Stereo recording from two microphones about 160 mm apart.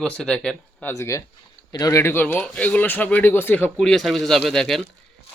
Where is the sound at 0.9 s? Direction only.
20° left (ahead or behind).